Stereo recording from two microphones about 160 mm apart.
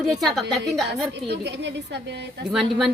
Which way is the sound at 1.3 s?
90° right.